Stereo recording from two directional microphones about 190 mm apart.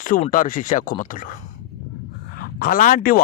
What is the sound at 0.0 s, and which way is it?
A man's voice, 45° left (ahead or behind).